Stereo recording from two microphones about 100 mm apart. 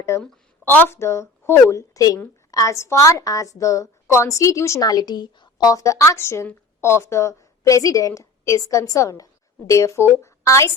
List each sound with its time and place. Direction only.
0.6 s a woman's voice: 20° left (ahead or behind)